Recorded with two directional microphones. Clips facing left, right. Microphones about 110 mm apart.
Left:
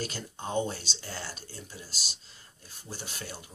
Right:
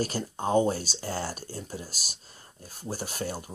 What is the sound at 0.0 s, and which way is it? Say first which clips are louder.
Speech: right 7 dB; 40° right (ahead or behind).